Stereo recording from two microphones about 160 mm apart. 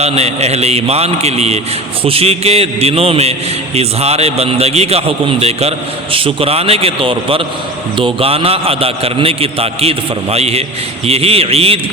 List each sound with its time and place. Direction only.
0.0 s a man's voice: 40° right (ahead or behind)